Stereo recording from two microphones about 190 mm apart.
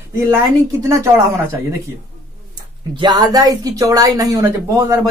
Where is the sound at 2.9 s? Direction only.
20° right (ahead or behind).